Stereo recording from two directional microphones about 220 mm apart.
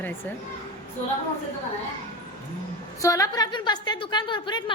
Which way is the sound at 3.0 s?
15° left (ahead or behind).